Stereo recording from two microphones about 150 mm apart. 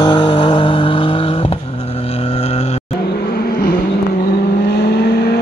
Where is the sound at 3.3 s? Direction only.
90° left.